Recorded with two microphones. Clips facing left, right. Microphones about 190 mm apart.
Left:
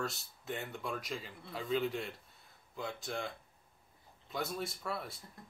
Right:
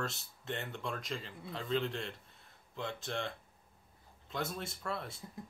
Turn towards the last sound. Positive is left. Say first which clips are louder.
# even
turn(degrees=5)  # may be behind; listen again after turning